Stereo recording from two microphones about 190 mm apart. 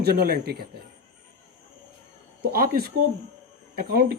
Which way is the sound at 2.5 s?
50° right (ahead or behind).